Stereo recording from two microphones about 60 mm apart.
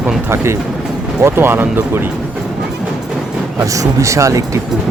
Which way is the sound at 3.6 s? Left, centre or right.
Right.